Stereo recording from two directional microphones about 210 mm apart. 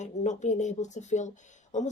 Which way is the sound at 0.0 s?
35° left (ahead or behind).